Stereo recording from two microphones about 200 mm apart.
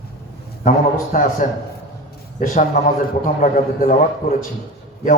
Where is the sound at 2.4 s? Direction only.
40° left (ahead or behind).